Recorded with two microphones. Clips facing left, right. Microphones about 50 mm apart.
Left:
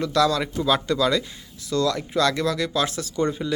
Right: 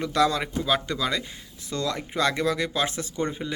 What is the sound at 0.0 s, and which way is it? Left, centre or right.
Speech, right.